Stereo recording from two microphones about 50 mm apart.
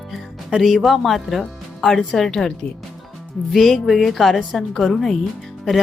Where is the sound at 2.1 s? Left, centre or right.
Centre.